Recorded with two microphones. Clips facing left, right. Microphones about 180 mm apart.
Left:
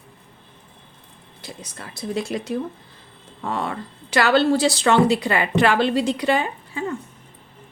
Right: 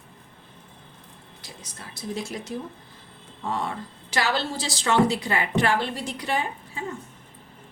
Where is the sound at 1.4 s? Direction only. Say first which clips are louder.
Left 7 dB; 60° left (ahead or behind).